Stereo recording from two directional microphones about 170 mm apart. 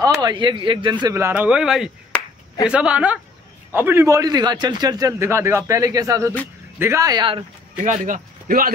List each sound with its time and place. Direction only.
0.0 s a man's voice: 25° right (ahead or behind)
7.7 s speech: 50° right (ahead or behind)